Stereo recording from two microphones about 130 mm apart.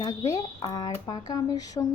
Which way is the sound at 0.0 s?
35° left (ahead or behind).